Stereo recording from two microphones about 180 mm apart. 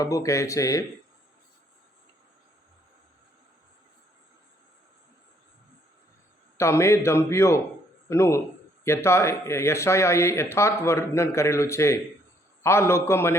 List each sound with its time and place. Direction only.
0.0 s speech: 20° left (ahead or behind)
6.6 s speech: 15° left (ahead or behind)